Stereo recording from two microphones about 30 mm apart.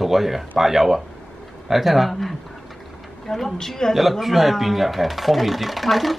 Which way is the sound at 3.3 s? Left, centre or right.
Centre.